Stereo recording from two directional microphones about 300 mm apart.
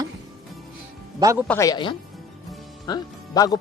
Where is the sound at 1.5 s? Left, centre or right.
Centre.